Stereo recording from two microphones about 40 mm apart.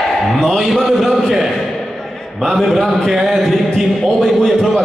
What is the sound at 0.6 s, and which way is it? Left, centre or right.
Speech, centre.